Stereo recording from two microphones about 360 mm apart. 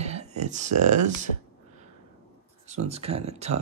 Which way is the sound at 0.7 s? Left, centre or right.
Right.